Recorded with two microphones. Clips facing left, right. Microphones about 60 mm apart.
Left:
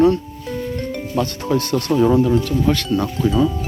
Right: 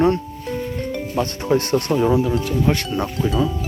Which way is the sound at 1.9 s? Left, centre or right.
Centre.